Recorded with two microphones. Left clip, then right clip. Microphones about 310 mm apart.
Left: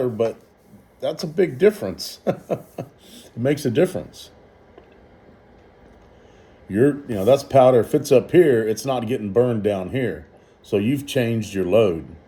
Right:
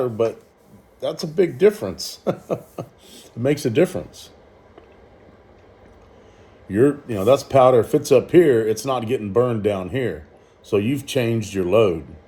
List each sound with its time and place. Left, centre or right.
0.2 s speech: centre
6.7 s speech: centre